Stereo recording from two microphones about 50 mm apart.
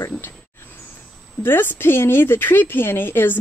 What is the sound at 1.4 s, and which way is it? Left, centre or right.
Speech, left.